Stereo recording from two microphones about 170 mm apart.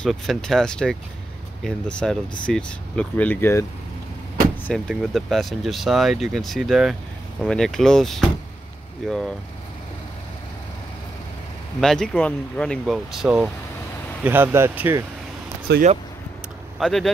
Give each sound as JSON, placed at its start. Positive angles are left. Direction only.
{"t": 0.0, "sound": "speech", "side_deg": 0}
{"t": 4.6, "sound": "speech", "side_deg": 0}
{"t": 11.8, "sound": "speech", "side_deg": 5}
{"t": 14.2, "sound": "speech", "side_deg": -10}
{"t": 15.7, "sound": "speech", "side_deg": -85}
{"t": 16.8, "sound": "speech", "side_deg": 0}